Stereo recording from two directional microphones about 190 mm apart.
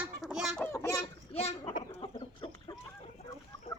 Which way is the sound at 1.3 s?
35° left (ahead or behind).